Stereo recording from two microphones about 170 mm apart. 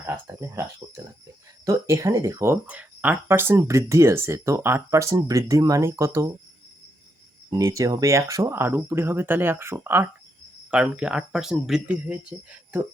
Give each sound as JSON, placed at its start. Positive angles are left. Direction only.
{"t": 0.0, "sound": "speech", "side_deg": -15}
{"t": 7.5, "sound": "speech", "side_deg": -20}